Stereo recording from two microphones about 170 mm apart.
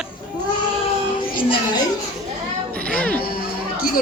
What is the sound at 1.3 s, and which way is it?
Speech, 30° left (ahead or behind).